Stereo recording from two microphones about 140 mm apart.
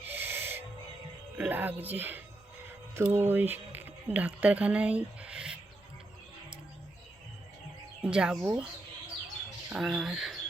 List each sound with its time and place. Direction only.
0.1 s owl: 15° right (ahead or behind)
1.4 s speech: 10° right (ahead or behind)
8.0 s speech: 5° right (ahead or behind)
9.6 s speech: 5° right (ahead or behind)